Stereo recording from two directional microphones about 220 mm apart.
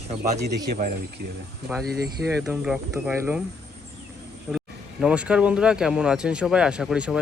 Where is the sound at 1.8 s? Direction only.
45° right (ahead or behind).